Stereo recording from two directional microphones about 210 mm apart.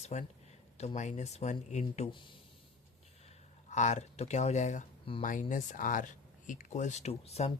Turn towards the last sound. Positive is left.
turn(degrees=30)  # may be behind; listen again after turning